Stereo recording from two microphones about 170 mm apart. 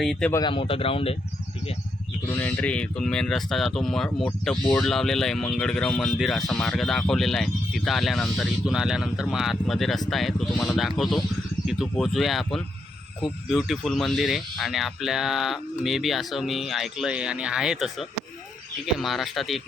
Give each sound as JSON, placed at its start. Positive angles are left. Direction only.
{"t": 0.0, "sound": "speech", "side_deg": 0}
{"t": 0.4, "sound": "speech", "side_deg": 30}
{"t": 2.3, "sound": "speech", "side_deg": 10}
{"t": 18.9, "sound": "speech", "side_deg": 0}